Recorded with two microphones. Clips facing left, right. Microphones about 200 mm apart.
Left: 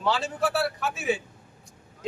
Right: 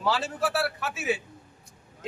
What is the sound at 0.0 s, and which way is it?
Speech, centre (ahead or behind).